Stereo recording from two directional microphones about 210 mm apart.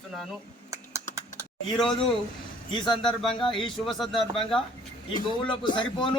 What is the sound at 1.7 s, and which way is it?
Speech, centre (ahead or behind).